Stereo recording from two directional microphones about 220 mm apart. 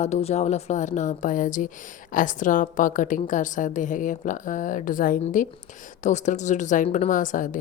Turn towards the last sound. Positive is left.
turn(degrees=35)  # may be behind; listen again after turning